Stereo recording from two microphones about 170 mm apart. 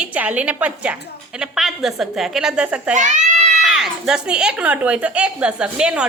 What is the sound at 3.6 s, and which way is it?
A woman's voice, centre (ahead or behind).